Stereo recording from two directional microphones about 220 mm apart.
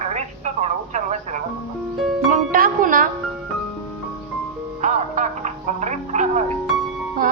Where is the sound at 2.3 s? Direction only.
40° right (ahead or behind).